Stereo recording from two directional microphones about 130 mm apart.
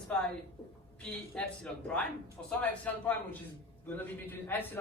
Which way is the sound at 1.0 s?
10° left (ahead or behind).